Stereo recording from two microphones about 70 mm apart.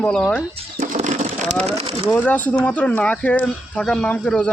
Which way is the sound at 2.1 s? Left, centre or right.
Centre.